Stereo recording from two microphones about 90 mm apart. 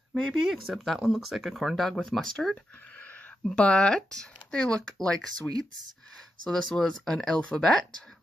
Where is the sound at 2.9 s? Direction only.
20° left (ahead or behind).